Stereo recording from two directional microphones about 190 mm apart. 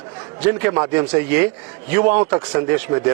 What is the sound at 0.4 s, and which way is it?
A man's voice, 15° right (ahead or behind).